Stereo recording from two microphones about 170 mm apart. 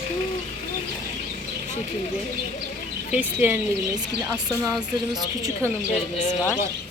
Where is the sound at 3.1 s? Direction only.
10° right (ahead or behind).